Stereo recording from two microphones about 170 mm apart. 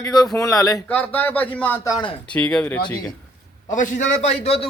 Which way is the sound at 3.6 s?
50° left (ahead or behind).